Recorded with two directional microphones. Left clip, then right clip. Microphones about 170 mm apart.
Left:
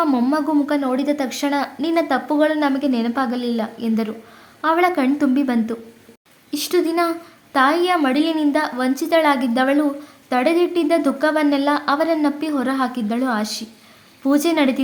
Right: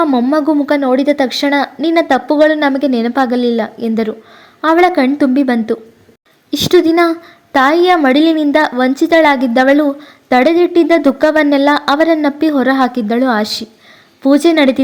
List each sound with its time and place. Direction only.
0.0 s a woman's voice: 15° right (ahead or behind)
0.3 s a woman's voice: 30° right (ahead or behind)